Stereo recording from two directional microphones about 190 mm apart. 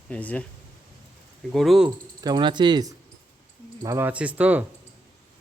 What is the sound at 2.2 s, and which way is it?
Speech, 20° right (ahead or behind).